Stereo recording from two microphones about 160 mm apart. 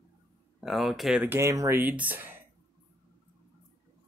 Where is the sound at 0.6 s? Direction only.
Centre (ahead or behind).